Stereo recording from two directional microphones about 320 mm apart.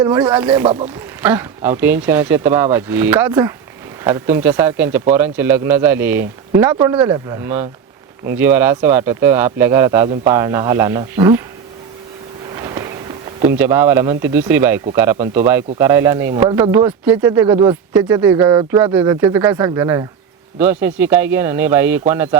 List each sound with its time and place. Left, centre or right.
0.0 s speech: centre
0.6 s speech: centre
1.2 s speech: centre
12.5 s a sound: centre
13.5 s speech: centre